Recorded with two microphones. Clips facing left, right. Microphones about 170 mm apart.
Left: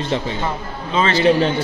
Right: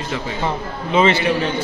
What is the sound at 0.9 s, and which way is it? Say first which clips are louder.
Speech: right 3 dB; 20° right (ahead or behind).